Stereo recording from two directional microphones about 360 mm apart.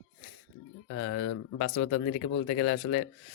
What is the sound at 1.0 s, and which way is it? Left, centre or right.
Speech, left.